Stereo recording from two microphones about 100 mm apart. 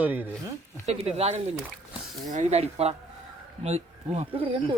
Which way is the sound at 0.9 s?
90° right.